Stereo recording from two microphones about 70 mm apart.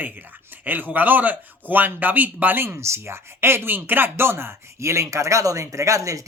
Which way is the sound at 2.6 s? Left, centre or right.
Right.